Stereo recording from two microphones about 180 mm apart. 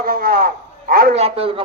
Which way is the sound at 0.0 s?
55° right (ahead or behind).